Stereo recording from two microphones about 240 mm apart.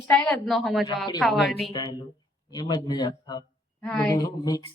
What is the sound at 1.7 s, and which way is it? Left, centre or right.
A man's voice, centre.